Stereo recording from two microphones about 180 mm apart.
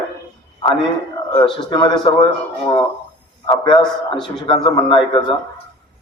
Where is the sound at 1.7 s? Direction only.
25° left (ahead or behind).